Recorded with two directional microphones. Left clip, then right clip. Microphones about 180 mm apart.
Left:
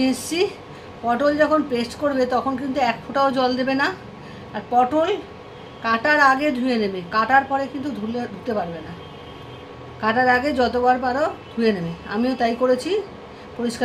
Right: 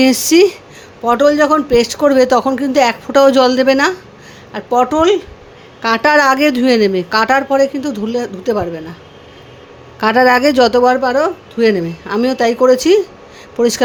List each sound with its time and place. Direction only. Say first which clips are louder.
0.0 s speech: right 12 dB; 65° right (ahead or behind)
10.0 s speech: right 8 dB; 65° right (ahead or behind)